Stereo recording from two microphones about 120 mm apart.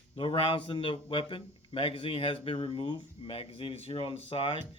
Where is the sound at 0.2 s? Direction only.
45° left (ahead or behind).